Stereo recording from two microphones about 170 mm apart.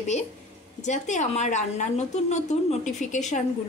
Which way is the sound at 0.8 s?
45° left (ahead or behind).